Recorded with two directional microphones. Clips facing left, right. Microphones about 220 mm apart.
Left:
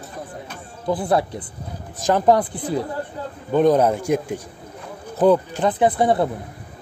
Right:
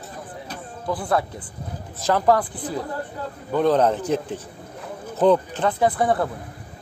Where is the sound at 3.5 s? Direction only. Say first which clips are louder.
Left 3 dB; 15° left (ahead or behind).